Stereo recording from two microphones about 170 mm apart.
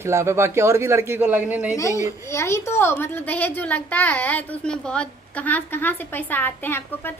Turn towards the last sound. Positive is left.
turn(degrees=10)  # may be behind; listen again after turning